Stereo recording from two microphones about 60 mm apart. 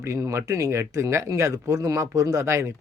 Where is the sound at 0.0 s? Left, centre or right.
Right.